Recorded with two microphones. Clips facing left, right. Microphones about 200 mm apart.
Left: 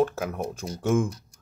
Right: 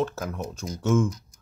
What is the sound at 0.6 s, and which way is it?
Speech, 30° left (ahead or behind).